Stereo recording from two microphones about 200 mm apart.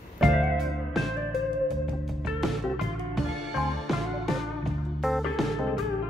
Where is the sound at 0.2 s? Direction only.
Centre (ahead or behind).